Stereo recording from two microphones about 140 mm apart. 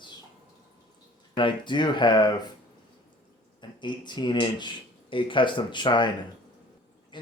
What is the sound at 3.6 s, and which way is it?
Speech, 35° left (ahead or behind).